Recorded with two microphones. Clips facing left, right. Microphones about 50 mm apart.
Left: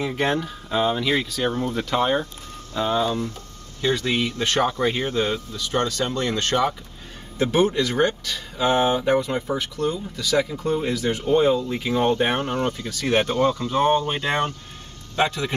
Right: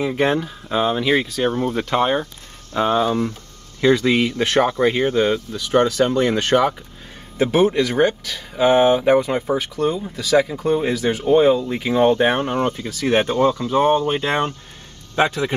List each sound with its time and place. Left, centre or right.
0.0 s speech: centre
2.7 s speech: right
3.8 s speech: right
4.6 s speech: right